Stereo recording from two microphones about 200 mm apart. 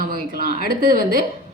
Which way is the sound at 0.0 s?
45° right (ahead or behind).